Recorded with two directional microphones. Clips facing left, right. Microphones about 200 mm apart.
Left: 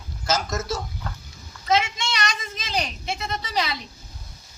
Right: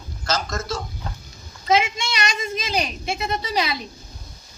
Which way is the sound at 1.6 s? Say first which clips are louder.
Right 2 dB; 20° right (ahead or behind).